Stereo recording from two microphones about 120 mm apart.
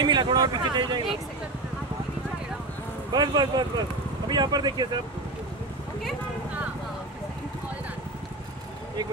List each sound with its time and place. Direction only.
0.0 s speech: 35° right (ahead or behind)
3.1 s speech: 35° right (ahead or behind)